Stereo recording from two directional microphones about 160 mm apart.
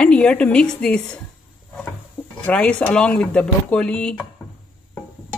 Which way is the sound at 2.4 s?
5° left (ahead or behind).